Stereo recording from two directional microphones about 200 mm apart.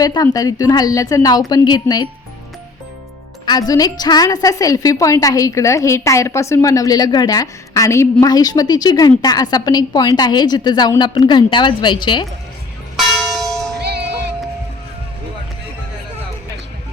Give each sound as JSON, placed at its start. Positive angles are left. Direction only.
{"t": 0.0, "sound": "a woman's voice", "side_deg": 20}
{"t": 3.4, "sound": "a woman's voice", "side_deg": 20}
{"t": 13.0, "sound": "church bell", "side_deg": 0}